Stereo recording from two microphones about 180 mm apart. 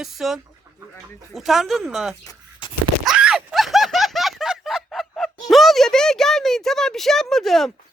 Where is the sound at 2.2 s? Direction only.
25° left (ahead or behind).